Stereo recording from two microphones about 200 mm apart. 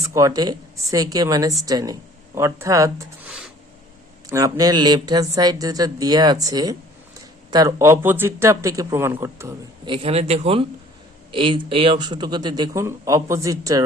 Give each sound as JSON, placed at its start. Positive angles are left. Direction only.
{"t": 0.1, "sound": "speech", "side_deg": -15}
{"t": 3.2, "sound": "a sound", "side_deg": -5}
{"t": 4.3, "sound": "speech", "side_deg": -15}
{"t": 9.9, "sound": "speech", "side_deg": -30}